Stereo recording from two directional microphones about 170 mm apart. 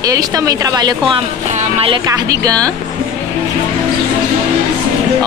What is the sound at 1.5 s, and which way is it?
Speech, 45° right (ahead or behind).